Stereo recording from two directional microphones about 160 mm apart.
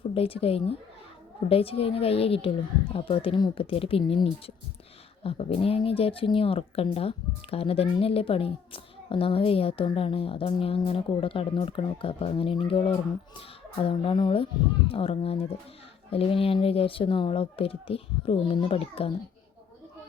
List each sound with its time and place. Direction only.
0.1 s a child's voice: 35° left (ahead or behind)